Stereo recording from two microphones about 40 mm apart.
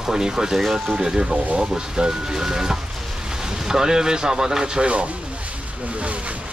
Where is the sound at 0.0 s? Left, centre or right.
Centre.